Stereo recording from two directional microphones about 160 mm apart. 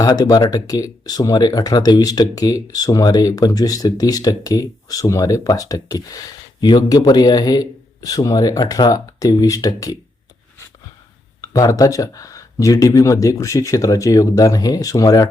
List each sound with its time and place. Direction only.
0.0 s speech: 25° left (ahead or behind)
11.3 s speech: 20° left (ahead or behind)